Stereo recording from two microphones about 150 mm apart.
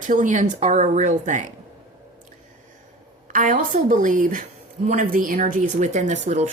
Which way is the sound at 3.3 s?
60° right (ahead or behind).